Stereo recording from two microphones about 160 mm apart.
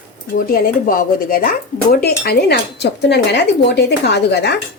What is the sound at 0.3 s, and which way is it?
Speech, 60° left (ahead or behind).